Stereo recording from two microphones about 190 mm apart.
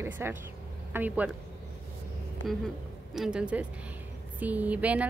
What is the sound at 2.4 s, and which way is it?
A woman's voice, centre (ahead or behind).